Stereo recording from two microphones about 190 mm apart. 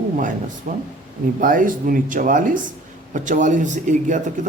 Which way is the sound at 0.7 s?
45° right (ahead or behind).